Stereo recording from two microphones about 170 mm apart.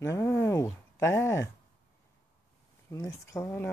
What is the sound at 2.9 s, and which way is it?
Speech, 15° left (ahead or behind).